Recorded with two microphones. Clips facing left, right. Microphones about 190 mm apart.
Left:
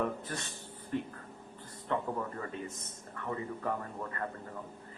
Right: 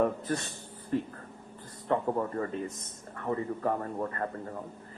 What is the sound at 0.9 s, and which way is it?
Speech, 35° right (ahead or behind).